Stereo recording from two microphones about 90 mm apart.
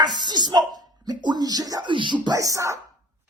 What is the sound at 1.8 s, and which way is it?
Speech, 65° right (ahead or behind).